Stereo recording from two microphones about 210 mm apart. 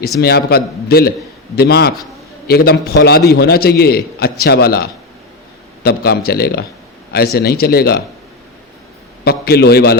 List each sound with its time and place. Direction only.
0.2 s a man's voice: 50° left (ahead or behind)
9.2 s a man's voice: 50° left (ahead or behind)